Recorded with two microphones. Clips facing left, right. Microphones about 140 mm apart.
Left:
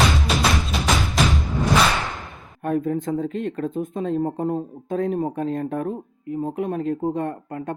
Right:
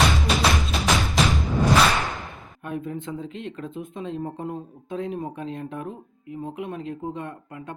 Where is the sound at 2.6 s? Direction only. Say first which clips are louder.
Left 8 dB; 45° left (ahead or behind).